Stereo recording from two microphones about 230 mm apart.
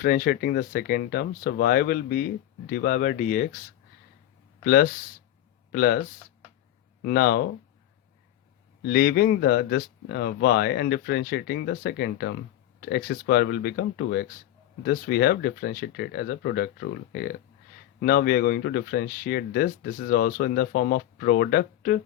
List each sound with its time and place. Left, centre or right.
0.0 s speech: left
4.6 s speech: left
7.0 s speech: left
8.8 s speech: left